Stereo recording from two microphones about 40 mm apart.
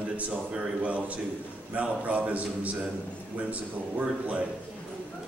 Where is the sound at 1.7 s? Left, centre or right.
Right.